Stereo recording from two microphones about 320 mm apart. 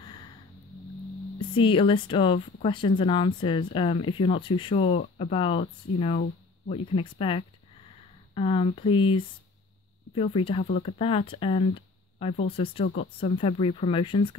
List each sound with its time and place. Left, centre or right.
1.4 s speech: centre